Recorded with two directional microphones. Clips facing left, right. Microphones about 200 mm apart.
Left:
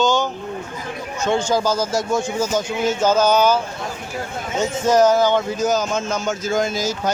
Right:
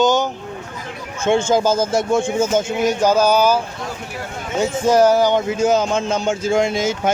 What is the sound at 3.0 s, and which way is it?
Speech, 10° right (ahead or behind).